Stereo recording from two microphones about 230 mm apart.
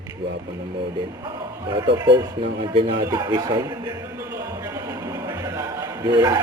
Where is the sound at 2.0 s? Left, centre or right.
Centre.